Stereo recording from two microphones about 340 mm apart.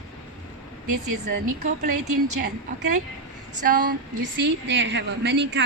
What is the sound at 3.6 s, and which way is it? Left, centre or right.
A woman's voice, right.